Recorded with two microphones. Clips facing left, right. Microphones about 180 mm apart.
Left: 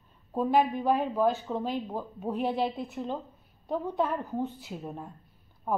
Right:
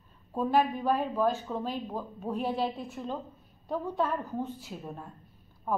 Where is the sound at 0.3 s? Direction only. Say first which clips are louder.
Left 1 dB; 15° left (ahead or behind).